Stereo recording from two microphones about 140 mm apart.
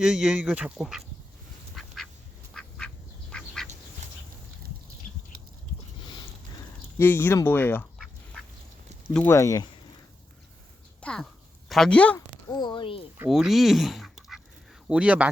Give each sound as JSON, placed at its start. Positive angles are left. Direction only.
{"t": 0.0, "sound": "speech", "side_deg": -5}
{"t": 1.8, "sound": "duck", "side_deg": 0}
{"t": 7.0, "sound": "speech", "side_deg": 15}
{"t": 7.9, "sound": "duck", "side_deg": 0}
{"t": 9.1, "sound": "speech", "side_deg": 15}
{"t": 11.0, "sound": "speech", "side_deg": 5}
{"t": 12.5, "sound": "speech", "side_deg": 30}
{"t": 13.2, "sound": "speech", "side_deg": -5}